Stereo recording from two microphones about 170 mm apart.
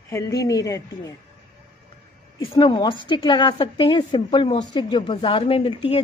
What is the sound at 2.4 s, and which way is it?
A woman's voice, 30° left (ahead or behind).